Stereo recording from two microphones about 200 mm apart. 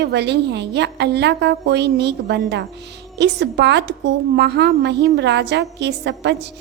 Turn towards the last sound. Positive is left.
turn(degrees=-60)  # may be behind; listen again after turning